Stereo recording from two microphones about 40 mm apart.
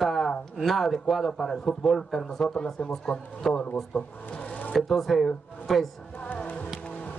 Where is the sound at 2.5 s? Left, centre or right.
Left.